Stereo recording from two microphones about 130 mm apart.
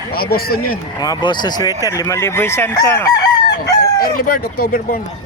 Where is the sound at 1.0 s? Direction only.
35° left (ahead or behind).